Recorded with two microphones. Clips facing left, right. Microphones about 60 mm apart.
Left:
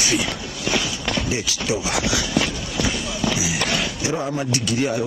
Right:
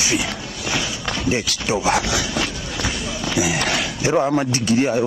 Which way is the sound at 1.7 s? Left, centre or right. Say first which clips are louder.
Right 5 dB; right.